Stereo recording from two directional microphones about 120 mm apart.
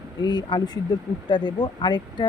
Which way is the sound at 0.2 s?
35° left (ahead or behind).